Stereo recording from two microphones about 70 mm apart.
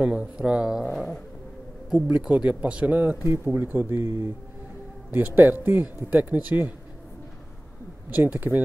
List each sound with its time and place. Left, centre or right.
0.0 s speech: centre
0.9 s a sound: centre
1.9 s speech: centre
8.1 s speech: right